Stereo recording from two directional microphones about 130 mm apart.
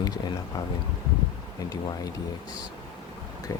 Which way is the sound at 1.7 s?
30° left (ahead or behind).